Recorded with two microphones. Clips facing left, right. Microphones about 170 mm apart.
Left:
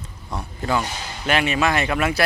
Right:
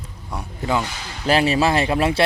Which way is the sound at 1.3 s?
35° right (ahead or behind).